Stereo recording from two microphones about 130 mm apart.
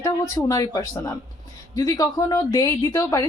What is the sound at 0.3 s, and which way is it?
A woman's voice, 30° left (ahead or behind).